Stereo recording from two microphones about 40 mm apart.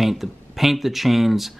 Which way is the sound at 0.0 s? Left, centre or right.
Centre.